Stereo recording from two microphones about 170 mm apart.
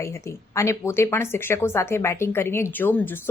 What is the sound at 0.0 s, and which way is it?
A woman's voice, 15° left (ahead or behind).